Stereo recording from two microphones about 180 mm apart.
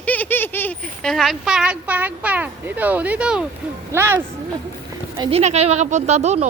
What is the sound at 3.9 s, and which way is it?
Speech, 15° right (ahead or behind).